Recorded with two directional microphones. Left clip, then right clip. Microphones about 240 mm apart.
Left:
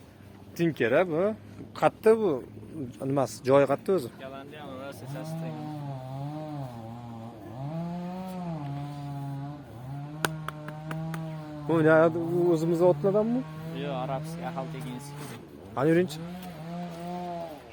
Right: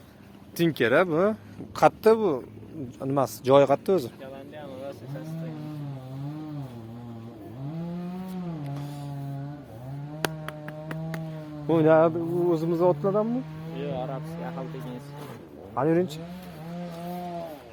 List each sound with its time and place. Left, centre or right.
0.5 s speech: centre
2.0 s speech: centre
10.2 s a sound: centre
11.7 s a man's voice: centre
13.7 s vehicle: left
15.7 s speech: centre